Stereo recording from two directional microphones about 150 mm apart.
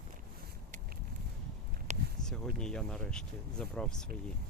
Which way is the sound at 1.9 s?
50° right (ahead or behind).